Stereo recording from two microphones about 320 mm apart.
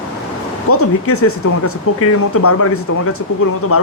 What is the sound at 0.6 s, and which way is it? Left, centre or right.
A man's voice, left.